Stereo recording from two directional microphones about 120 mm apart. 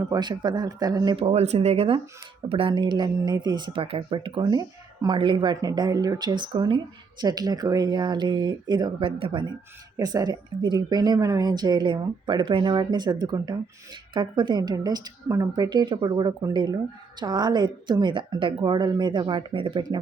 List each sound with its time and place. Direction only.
0.1 s speech: 35° right (ahead or behind)
1.1 s a woman's voice: 60° right (ahead or behind)
10.0 s speech: 30° right (ahead or behind)